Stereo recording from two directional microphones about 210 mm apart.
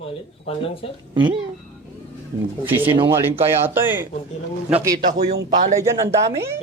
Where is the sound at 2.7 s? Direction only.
10° right (ahead or behind).